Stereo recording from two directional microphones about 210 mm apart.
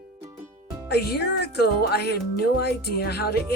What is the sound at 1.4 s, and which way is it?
Speech, 50° left (ahead or behind).